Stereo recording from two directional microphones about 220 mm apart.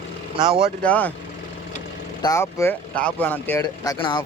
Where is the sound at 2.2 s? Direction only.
15° left (ahead or behind).